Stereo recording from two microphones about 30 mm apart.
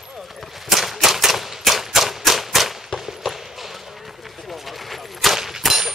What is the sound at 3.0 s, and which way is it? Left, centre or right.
Basketball bounce, centre.